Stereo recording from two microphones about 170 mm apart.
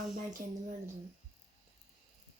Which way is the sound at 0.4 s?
45° right (ahead or behind).